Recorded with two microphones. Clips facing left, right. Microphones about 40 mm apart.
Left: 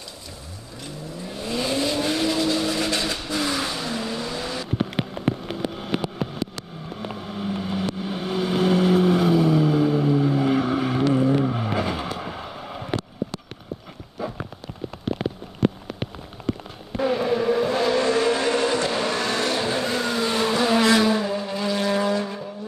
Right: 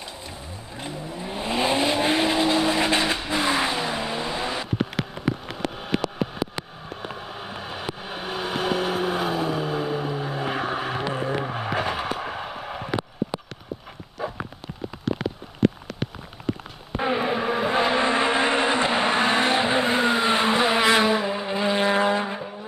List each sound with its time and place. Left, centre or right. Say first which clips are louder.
0.7 s vehicle: right 2 dB; right
6.5 s vehicle: right 1 dB; centre
7.2 s vehicle: left 5 dB; right
11.7 s vehicle: even; right
12.2 s a sound: right 2 dB; right
16.9 s vehicle: left 2 dB; right